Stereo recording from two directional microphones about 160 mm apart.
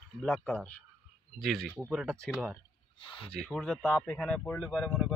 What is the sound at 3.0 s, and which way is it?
Speech, 30° left (ahead or behind).